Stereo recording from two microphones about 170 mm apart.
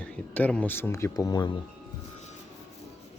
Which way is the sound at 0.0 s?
5° left (ahead or behind).